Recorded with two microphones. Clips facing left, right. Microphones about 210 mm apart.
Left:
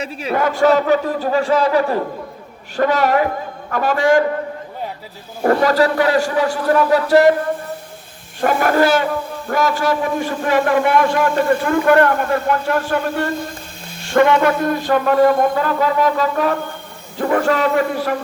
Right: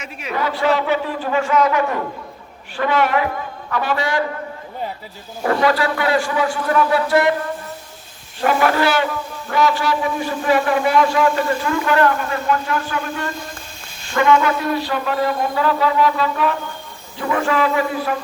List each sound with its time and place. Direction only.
0.0 s a man's voice: 35° left (ahead or behind)
0.3 s a man's voice: 45° left (ahead or behind)
5.4 s a man's voice: 45° left (ahead or behind)
8.4 s speech: 50° left (ahead or behind)